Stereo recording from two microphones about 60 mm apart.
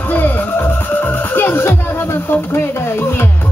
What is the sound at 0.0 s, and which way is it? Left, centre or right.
Music, left.